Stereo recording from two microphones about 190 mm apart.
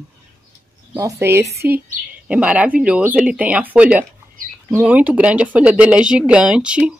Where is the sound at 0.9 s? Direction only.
15° right (ahead or behind).